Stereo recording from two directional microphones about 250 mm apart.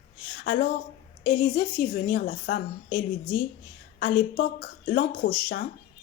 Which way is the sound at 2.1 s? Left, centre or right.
Left.